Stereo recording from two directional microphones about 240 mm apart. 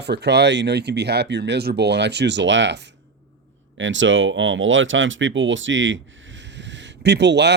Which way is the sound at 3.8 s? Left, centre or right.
Right.